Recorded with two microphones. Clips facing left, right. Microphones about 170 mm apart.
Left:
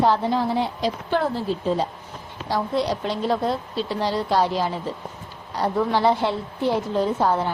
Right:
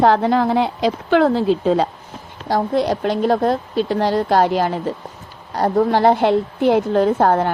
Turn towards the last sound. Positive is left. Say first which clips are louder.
# right 6 dB
turn(degrees=-55)  # may be behind; listen again after turning